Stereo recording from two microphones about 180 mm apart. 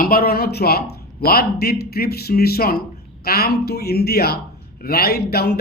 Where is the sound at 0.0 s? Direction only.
55° left (ahead or behind).